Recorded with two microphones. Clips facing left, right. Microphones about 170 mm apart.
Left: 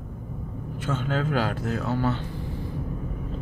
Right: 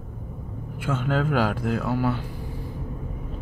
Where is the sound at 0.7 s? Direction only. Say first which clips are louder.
Right 2 dB; 10° right (ahead or behind).